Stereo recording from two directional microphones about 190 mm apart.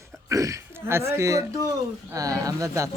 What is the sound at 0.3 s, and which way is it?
Speech, 15° right (ahead or behind).